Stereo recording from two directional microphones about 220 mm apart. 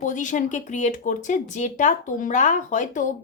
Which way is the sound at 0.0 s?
35° left (ahead or behind).